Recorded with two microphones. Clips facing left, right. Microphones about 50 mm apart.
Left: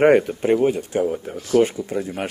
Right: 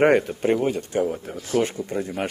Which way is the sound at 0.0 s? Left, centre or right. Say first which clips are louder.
Left 3 dB; centre.